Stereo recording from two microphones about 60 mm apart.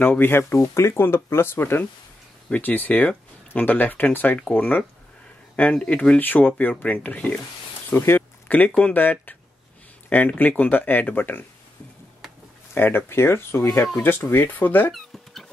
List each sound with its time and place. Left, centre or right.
0.0 s speech: left
4.4 s speech: left
7.9 s speech: left
8.5 s speech: left
12.7 s speech: left
14.0 s speech: left
14.9 s a sound: centre